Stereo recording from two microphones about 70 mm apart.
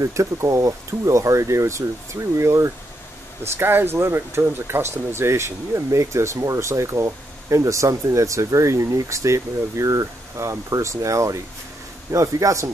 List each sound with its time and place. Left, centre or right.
0.0 s speech: right
3.5 s speech: right